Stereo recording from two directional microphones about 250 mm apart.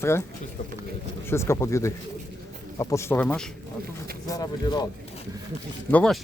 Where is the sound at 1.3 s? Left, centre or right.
Centre.